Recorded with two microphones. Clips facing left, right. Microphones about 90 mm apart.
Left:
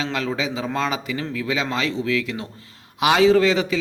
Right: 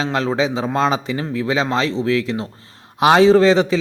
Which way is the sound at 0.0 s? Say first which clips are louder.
Right 6 dB; 35° right (ahead or behind).